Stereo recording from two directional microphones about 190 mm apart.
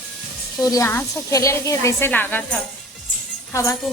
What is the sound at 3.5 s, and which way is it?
Speech, 15° left (ahead or behind).